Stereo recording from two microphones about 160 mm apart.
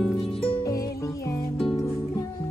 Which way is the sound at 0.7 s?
20° left (ahead or behind).